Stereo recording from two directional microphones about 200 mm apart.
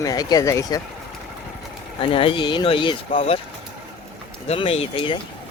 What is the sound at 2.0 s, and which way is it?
Speech, 25° left (ahead or behind).